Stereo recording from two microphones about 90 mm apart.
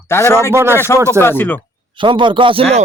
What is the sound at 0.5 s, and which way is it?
Speech, 25° right (ahead or behind).